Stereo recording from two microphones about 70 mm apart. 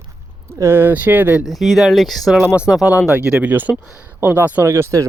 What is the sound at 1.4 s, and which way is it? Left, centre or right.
Speech, centre.